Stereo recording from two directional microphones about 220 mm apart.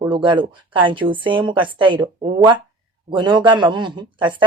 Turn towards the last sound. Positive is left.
turn(degrees=-20)  # may be behind; listen again after turning